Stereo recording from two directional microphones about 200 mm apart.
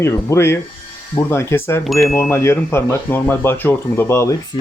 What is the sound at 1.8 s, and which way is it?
Chime, centre (ahead or behind).